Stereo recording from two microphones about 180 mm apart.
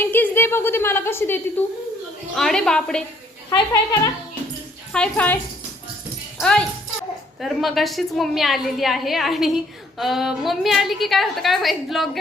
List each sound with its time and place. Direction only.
0.0 s a woman's voice: 10° left (ahead or behind)
3.5 s speech: 20° left (ahead or behind)
4.9 s a woman's voice: 5° left (ahead or behind)
7.3 s a woman's voice: centre (ahead or behind)